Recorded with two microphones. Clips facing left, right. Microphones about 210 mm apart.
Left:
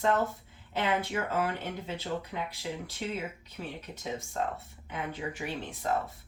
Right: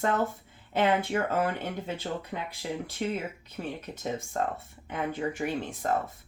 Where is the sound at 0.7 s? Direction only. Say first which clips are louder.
Right 5 dB; 55° right (ahead or behind).